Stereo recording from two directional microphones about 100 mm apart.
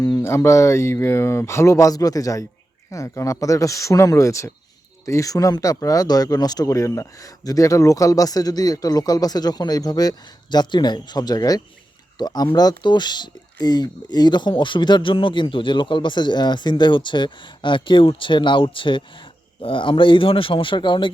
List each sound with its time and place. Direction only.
0.2 s speech: 25° left (ahead or behind); by 21.1 s 55° left (ahead or behind)